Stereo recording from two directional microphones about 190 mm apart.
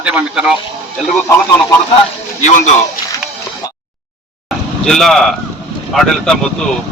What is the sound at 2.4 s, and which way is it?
Speech, 40° left (ahead or behind).